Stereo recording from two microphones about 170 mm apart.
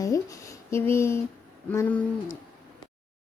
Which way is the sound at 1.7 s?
15° left (ahead or behind).